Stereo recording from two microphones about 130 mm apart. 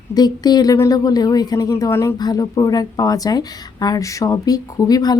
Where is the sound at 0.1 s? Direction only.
30° left (ahead or behind).